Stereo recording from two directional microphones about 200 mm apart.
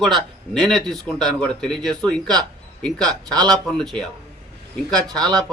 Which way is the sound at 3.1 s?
20° right (ahead or behind).